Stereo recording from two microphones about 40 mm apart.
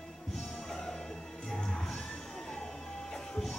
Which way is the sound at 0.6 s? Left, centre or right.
Centre.